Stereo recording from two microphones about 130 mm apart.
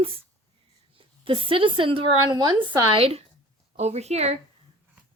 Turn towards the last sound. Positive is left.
turn(degrees=-55)  # may be behind; listen again after turning